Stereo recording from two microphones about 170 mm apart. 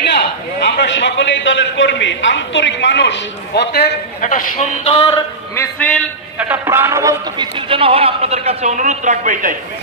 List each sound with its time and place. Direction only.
0.0 s a man's voice: 75° left (ahead or behind)
4.2 s a man's voice: 55° left (ahead or behind); by 5.1 s 35° left (ahead or behind)
5.8 s a man's voice: 10° left (ahead or behind)
6.3 s a man's voice: 10° right (ahead or behind); by 9.6 s 50° right (ahead or behind)